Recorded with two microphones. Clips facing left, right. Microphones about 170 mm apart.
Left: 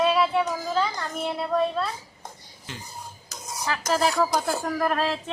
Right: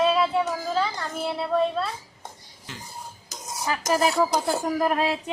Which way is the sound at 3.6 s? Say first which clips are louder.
Right 1 dB; 20° right (ahead or behind).